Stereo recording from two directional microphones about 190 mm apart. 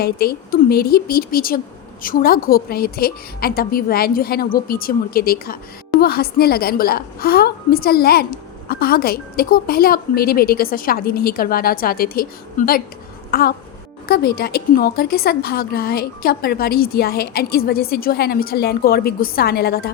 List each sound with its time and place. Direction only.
0.0 s a woman's voice: 55° left (ahead or behind)